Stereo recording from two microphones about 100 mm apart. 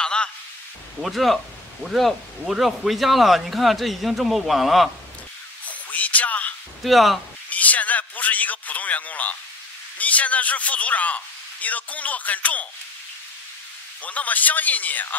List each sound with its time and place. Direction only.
0.0 s a sound: 10° left (ahead or behind)
1.0 s speech: centre (ahead or behind)
5.7 s a sound: 15° left (ahead or behind)
6.8 s speech: centre (ahead or behind)
7.4 s a man's voice: 15° left (ahead or behind)
14.0 s speech: 15° left (ahead or behind)